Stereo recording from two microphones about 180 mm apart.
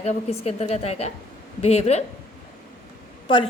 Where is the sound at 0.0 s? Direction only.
35° left (ahead or behind).